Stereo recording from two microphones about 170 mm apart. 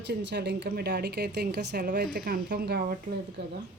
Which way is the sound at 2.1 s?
60° right (ahead or behind).